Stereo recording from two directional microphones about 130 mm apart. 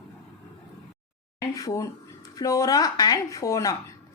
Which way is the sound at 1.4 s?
25° left (ahead or behind).